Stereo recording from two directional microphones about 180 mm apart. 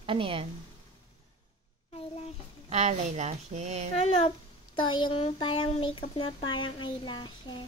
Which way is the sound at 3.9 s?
35° left (ahead or behind).